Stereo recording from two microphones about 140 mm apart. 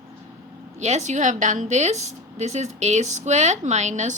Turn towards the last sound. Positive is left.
turn(degrees=-55)  # may be behind; listen again after turning